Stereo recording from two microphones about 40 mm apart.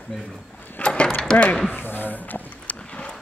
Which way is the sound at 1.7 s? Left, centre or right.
Left.